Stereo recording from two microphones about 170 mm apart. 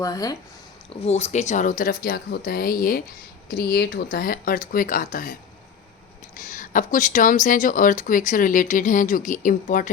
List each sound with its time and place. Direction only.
0.0 s speech: 20° left (ahead or behind)
1.0 s speech: 40° left (ahead or behind)